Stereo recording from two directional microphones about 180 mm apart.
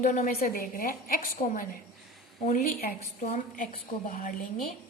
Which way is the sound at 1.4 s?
35° left (ahead or behind).